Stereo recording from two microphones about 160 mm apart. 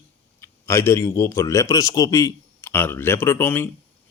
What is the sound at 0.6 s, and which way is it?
Speech, 15° left (ahead or behind).